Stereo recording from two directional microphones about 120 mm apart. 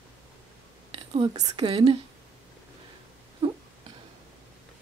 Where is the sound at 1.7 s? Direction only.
50° right (ahead or behind).